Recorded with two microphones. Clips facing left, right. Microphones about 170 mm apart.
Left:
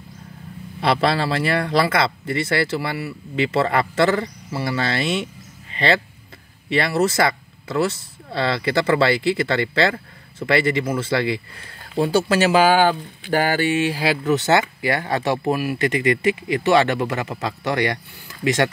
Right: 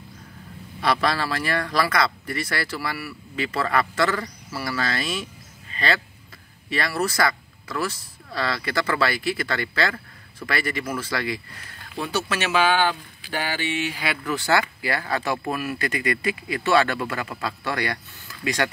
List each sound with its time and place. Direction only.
0.7 s speech: 25° left (ahead or behind)